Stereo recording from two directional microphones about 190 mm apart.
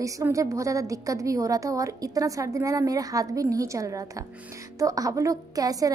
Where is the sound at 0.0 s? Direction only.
15° right (ahead or behind).